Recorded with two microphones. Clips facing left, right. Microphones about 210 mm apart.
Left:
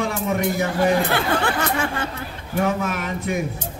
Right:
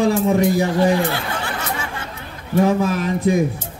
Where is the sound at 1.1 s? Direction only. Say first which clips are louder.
Left 5 dB; 55° left (ahead or behind).